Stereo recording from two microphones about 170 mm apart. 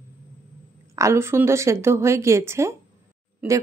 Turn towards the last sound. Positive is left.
turn(degrees=-10)  # may be behind; listen again after turning